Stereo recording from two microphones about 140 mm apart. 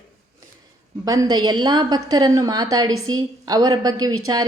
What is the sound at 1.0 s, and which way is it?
A woman's voice, 25° right (ahead or behind).